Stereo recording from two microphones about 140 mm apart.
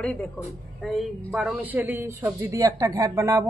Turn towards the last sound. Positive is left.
turn(degrees=-20)  # may be behind; listen again after turning